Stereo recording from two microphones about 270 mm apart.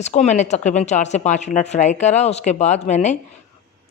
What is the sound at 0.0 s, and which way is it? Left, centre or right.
Speech, left.